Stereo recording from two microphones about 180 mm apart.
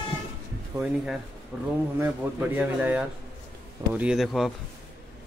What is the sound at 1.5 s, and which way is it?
Speech, 5° right (ahead or behind).